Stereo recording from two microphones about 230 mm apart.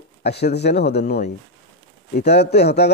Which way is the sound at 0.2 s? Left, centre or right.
Left.